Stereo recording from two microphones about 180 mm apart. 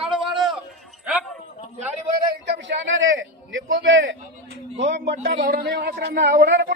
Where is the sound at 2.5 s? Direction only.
90° right.